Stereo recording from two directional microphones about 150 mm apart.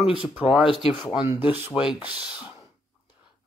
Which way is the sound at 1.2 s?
10° right (ahead or behind).